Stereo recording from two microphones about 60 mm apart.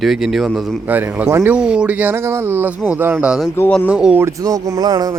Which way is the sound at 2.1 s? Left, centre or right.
Right.